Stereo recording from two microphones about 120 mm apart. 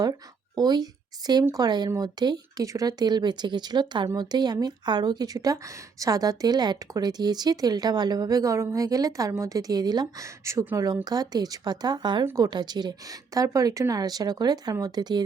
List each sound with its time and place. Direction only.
0.0 s speech: 35° right (ahead or behind)
12.2 s speech: 25° right (ahead or behind)
12.5 s speech: 35° right (ahead or behind)